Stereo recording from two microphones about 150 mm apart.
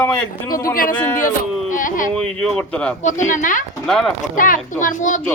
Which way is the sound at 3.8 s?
5° left (ahead or behind).